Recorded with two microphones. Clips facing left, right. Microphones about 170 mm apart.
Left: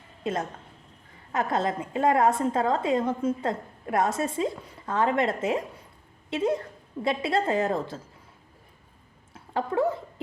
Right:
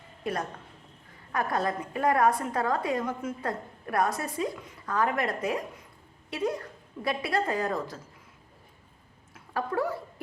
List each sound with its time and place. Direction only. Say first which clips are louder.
0.2 s a woman's voice: left 2 dB; 20° left (ahead or behind)
9.3 s speech: left 3 dB; 25° left (ahead or behind)